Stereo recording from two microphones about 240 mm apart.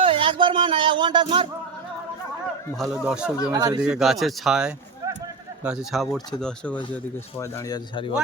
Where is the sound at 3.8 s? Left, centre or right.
Centre.